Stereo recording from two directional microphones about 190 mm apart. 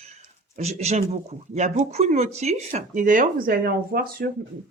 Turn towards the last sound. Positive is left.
turn(degrees=-50)  # may be behind; listen again after turning